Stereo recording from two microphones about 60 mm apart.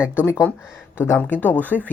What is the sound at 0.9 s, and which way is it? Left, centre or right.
Speech, left.